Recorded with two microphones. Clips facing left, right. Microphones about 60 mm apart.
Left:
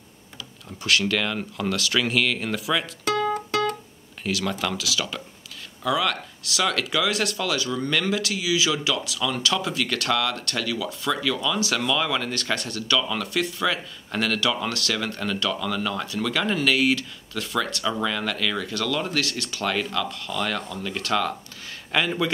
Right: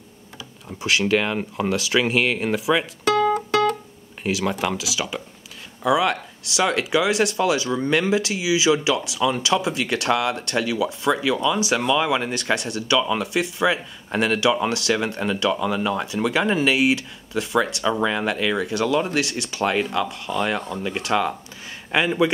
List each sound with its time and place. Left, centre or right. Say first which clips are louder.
0.8 s speech: right 3 dB; centre
3.3 s music: right 5 dB; right
4.2 s speech: right 3 dB; right